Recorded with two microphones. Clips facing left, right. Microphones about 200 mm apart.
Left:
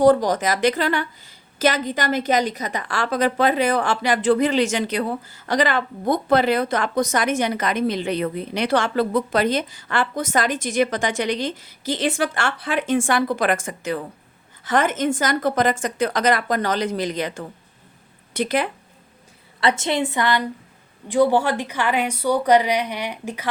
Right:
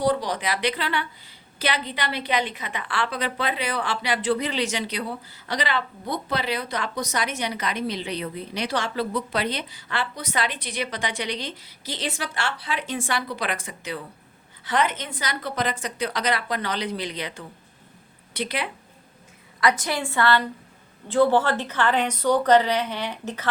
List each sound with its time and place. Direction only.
0.0 s a woman's voice: 45° left (ahead or behind)
19.5 s a woman's voice: 25° left (ahead or behind); by 23.5 s 10° left (ahead or behind)